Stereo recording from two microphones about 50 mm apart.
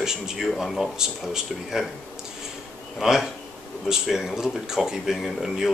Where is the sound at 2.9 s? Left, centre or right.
Centre.